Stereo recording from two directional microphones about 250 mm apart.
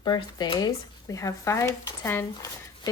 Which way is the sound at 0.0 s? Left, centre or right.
Centre.